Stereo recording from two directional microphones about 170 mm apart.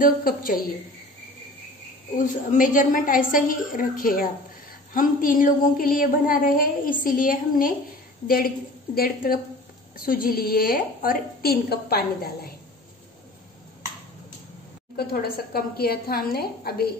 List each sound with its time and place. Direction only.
0.0 s a woman's voice: 55° left (ahead or behind)
2.1 s a woman's voice: 50° left (ahead or behind)
8.9 s a woman's voice: 60° left (ahead or behind)
15.0 s a woman's voice: 65° left (ahead or behind)